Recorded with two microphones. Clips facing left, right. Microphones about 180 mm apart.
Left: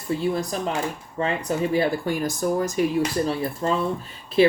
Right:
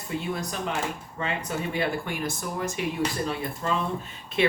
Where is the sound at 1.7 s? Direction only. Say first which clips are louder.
Left 5 dB; 40° left (ahead or behind).